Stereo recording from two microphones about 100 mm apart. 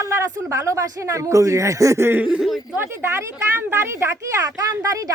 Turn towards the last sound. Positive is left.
turn(degrees=-35)  # may be behind; listen again after turning